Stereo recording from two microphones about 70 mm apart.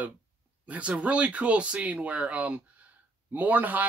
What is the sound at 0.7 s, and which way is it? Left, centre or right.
Speech, centre.